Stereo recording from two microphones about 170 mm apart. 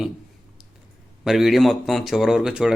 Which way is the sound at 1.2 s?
Centre (ahead or behind).